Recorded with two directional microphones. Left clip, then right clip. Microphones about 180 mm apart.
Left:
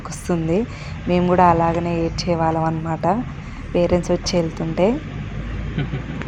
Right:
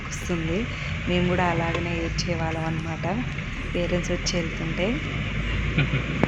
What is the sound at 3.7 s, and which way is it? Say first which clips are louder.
A woman's voice: left 9 dB; 20° left (ahead or behind).